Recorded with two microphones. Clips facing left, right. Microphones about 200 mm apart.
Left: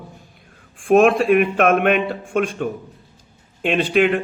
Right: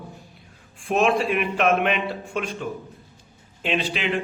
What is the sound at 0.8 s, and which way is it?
A man's voice, 50° left (ahead or behind).